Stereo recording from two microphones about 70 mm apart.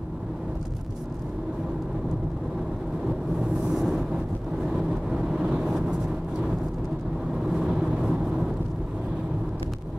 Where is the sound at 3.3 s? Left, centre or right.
Centre.